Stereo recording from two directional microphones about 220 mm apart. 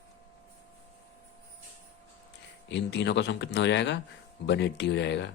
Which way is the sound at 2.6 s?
50° left (ahead or behind).